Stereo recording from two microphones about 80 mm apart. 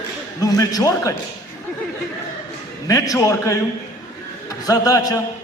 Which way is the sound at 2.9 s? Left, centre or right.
Left.